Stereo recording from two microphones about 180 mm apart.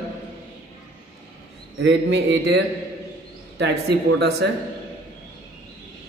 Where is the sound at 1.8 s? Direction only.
70° right (ahead or behind).